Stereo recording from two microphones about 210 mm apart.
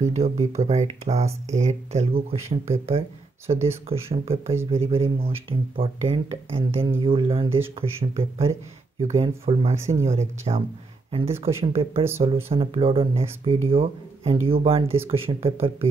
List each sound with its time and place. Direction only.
0.0 s speech: 30° right (ahead or behind)
9.8 s speech: 15° right (ahead or behind)
10.0 s speech: 30° right (ahead or behind)